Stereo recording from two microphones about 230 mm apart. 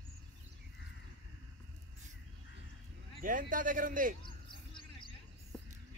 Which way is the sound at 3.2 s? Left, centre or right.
Right.